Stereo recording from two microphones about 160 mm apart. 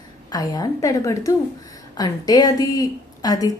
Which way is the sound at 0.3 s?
25° left (ahead or behind).